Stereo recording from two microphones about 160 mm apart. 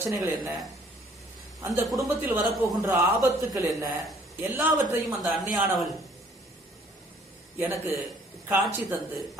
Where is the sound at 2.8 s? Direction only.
15° right (ahead or behind).